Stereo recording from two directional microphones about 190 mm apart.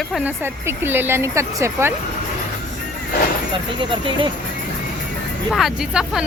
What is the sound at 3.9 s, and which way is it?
Speech, 25° right (ahead or behind).